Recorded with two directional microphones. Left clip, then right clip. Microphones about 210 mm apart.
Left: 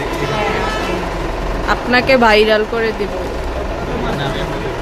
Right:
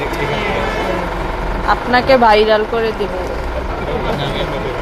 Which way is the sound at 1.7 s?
20° left (ahead or behind).